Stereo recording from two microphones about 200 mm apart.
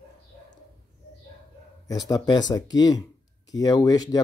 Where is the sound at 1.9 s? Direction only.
20° left (ahead or behind).